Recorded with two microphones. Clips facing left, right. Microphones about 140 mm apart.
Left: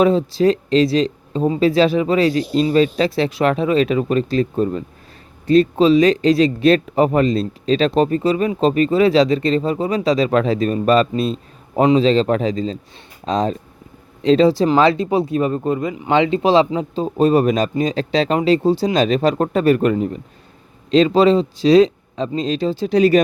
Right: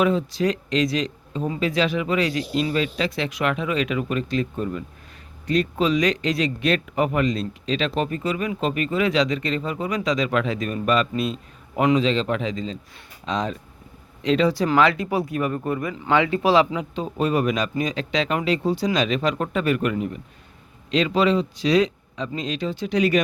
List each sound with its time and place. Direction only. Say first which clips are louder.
0.0 s speech: left 6 dB; 30° left (ahead or behind)